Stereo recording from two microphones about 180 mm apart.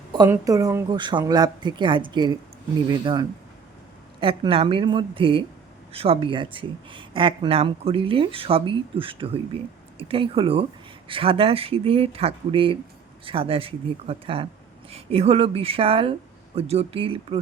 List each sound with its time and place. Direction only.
0.1 s a woman's voice: 20° right (ahead or behind)